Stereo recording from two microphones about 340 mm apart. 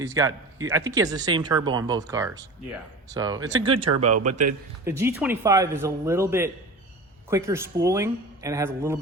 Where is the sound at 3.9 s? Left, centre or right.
Right.